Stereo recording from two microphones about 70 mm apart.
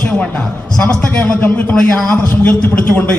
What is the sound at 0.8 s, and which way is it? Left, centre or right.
A man's voice, centre.